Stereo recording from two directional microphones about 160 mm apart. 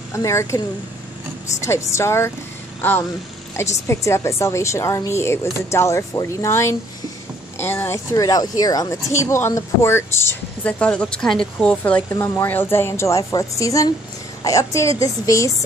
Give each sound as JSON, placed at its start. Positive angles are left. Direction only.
{"t": 0.1, "sound": "speech", "side_deg": 20}
{"t": 1.6, "sound": "a woman's voice", "side_deg": 15}